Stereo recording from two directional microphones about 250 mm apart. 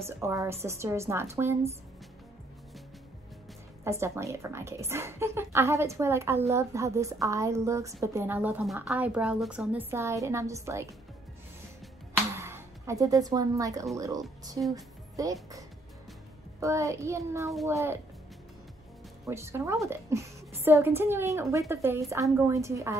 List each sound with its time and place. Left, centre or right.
0.2 s a woman's voice: centre
3.8 s a woman's voice: centre
12.1 s music: centre
13.9 s a woman's voice: centre
16.5 s a woman's voice: centre
19.2 s a woman's voice: centre